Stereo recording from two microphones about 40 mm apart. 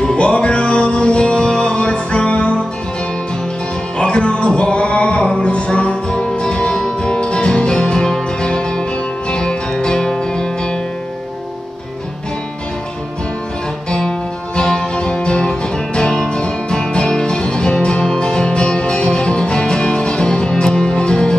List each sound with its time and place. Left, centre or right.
0.0 s music: left
4.0 s music: left
13.8 s music: left